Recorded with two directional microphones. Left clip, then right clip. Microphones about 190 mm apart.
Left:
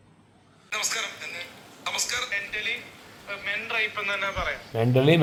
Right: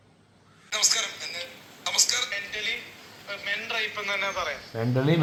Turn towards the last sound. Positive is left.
turn(degrees=45)  # may be behind; listen again after turning